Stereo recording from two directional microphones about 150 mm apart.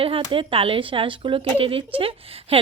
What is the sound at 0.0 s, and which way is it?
Speech, 35° right (ahead or behind).